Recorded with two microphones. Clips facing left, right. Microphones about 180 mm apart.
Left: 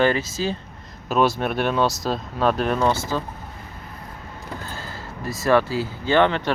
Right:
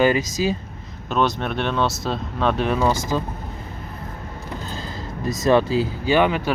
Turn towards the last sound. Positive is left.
turn(degrees=-10)  # may be behind; listen again after turning